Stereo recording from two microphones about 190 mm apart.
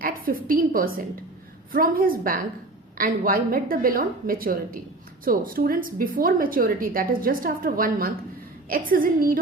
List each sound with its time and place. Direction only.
0.0 s a woman's voice: 50° right (ahead or behind)